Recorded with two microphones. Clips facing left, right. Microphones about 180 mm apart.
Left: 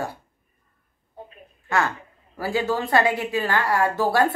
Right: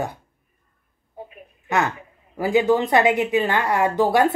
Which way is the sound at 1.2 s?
20° right (ahead or behind).